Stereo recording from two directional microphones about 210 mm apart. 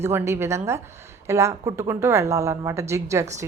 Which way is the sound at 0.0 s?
10° right (ahead or behind).